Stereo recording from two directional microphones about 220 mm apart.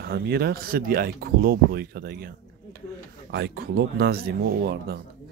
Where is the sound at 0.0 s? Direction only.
45° right (ahead or behind).